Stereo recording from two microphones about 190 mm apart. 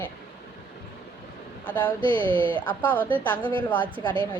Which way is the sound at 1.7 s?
10° left (ahead or behind).